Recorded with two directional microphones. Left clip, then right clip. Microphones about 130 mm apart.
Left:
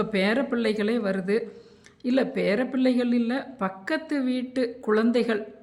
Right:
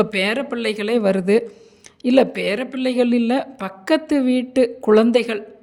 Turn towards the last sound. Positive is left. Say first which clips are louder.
# right 8 dB
turn(degrees=-40)  # may be behind; listen again after turning